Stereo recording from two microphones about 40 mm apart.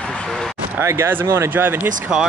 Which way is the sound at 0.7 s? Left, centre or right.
Right.